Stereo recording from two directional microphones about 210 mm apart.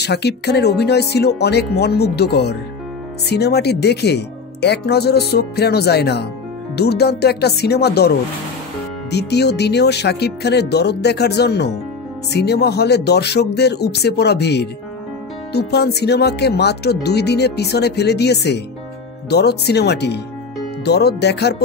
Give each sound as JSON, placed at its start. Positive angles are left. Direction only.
{"t": 0.0, "sound": "speech", "side_deg": 55}
{"t": 9.1, "sound": "speech", "side_deg": 50}